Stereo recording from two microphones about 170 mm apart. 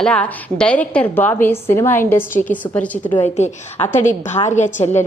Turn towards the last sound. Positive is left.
turn(degrees=45)  # may be behind; listen again after turning